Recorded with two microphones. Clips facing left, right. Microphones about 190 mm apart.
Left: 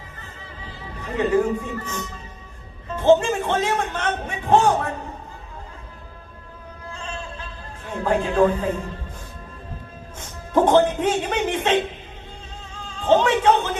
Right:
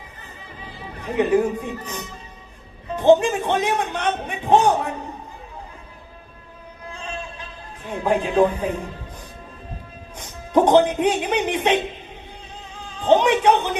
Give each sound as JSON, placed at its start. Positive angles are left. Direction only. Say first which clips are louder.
{"t": 0.2, "sound": "music", "louder": "right 1 dB", "side_deg": -15}
{"t": 6.9, "sound": "a sound", "louder": "right 1 dB", "side_deg": -15}
{"t": 7.9, "sound": "speech", "louder": "right 1 dB", "side_deg": -15}
{"t": 10.2, "sound": "speech", "louder": "right 2 dB", "side_deg": -15}
{"t": 12.7, "sound": "music", "louder": "right 1 dB", "side_deg": -15}